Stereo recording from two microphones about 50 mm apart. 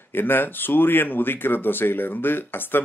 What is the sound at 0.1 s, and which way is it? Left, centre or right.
Speech, left.